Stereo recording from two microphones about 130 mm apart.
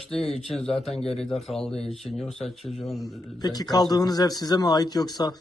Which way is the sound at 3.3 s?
30° left (ahead or behind).